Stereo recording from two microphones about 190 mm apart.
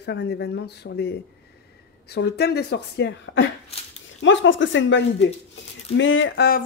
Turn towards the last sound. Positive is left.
turn(degrees=80)